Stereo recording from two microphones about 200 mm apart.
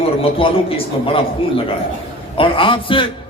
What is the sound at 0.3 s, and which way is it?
A man's voice, 25° left (ahead or behind).